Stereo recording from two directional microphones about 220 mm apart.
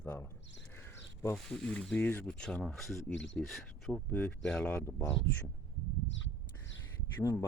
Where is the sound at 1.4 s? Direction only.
5° left (ahead or behind).